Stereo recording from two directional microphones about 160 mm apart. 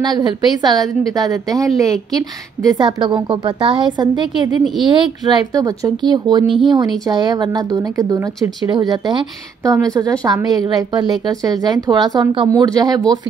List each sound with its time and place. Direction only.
0.0 s a woman's voice: 25° right (ahead or behind)